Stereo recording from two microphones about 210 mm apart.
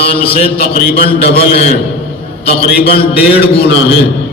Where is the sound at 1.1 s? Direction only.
50° left (ahead or behind).